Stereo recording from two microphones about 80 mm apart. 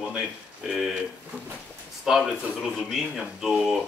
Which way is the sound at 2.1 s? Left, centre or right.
Centre.